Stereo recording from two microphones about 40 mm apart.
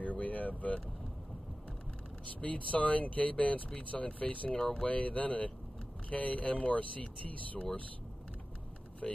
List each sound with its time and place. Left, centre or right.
0.0 s vehicle: left
2.4 s speech: left
4.5 s speech: centre
4.8 s speech: left
9.0 s speech: left